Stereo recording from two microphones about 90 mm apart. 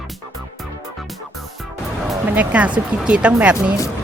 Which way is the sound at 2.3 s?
15° right (ahead or behind).